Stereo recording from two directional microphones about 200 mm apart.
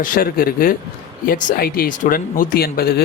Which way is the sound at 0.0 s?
45° left (ahead or behind).